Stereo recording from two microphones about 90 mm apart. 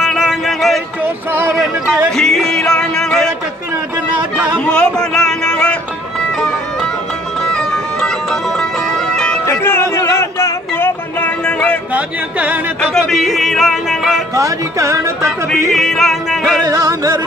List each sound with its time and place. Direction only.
0.0 s music: 5° right (ahead or behind)
1.0 s music: 25° right (ahead or behind)
2.1 s music: 5° left (ahead or behind)
4.6 s music: 10° left (ahead or behind)
7.5 s music: 5° left (ahead or behind)
9.5 s music: 25° left (ahead or behind)
11.1 s music: 15° left (ahead or behind)
11.9 s speech: 15° right (ahead or behind)
12.9 s music: centre (ahead or behind)
14.3 s speech: 35° right (ahead or behind)
15.7 s music: centre (ahead or behind)
16.6 s speech: 40° right (ahead or behind)